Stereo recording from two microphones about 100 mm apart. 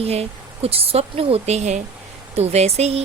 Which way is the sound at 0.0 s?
85° right.